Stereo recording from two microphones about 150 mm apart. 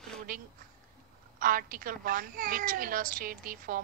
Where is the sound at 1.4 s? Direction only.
70° right (ahead or behind).